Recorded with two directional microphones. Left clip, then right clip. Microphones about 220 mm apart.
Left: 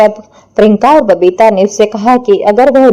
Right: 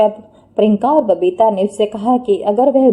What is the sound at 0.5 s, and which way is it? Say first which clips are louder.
A woman's voice: left 7 dB; 20° left (ahead or behind).